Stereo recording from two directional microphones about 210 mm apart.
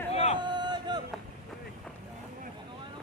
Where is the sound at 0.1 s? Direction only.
30° left (ahead or behind).